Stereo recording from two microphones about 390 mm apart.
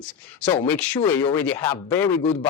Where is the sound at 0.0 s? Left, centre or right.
Centre.